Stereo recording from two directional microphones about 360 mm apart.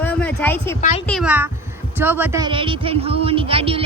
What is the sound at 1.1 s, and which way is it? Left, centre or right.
Speech, centre.